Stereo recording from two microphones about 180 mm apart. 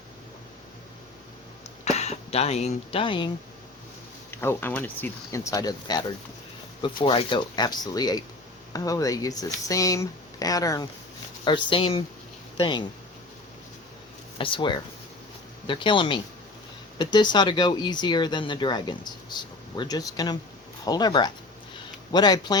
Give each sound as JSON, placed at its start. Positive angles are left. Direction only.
{"t": 1.8, "sound": "speech", "side_deg": 40}
{"t": 4.3, "sound": "speech", "side_deg": 10}
{"t": 14.3, "sound": "speech", "side_deg": 30}